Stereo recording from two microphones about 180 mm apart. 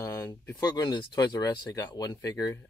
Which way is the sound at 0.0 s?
15° left (ahead or behind).